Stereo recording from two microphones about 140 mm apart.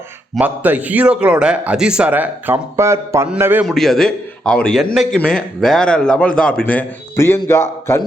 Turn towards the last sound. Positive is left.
turn(degrees=20)  # may be behind; listen again after turning